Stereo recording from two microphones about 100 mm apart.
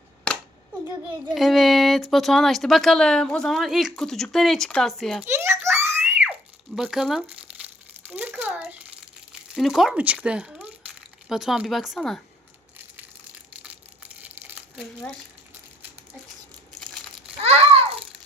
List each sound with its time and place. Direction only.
1.3 s speech: centre (ahead or behind)
5.2 s a sound: 25° right (ahead or behind)
6.7 s speech: 5° right (ahead or behind)
7.3 s crumpling: 15° right (ahead or behind)
9.6 s speech: centre (ahead or behind)
14.2 s crumpling: 15° right (ahead or behind)
16.8 s crumpling: centre (ahead or behind)
17.4 s a sound: 90° right; by 18.0 s 70° right (ahead or behind)